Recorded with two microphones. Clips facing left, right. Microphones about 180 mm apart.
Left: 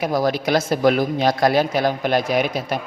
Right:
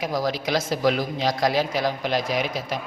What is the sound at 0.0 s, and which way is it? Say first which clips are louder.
A man's voice: left 5 dB; 55° left (ahead or behind).